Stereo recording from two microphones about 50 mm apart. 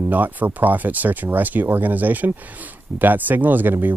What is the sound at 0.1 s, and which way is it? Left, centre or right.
Speech, right.